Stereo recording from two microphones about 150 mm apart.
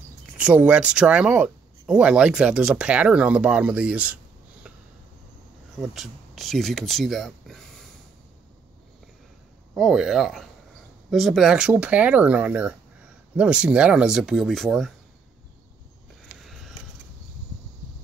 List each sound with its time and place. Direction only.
0.4 s speech: 10° right (ahead or behind)
5.8 s speech: centre (ahead or behind)
9.8 s speech: centre (ahead or behind)